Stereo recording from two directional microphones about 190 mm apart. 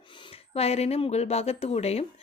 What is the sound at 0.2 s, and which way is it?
Speech, 30° left (ahead or behind).